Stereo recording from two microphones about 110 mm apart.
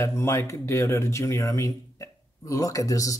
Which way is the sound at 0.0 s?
25° left (ahead or behind).